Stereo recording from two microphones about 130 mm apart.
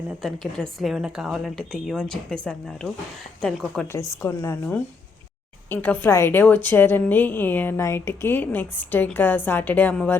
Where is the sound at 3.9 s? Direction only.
20° left (ahead or behind).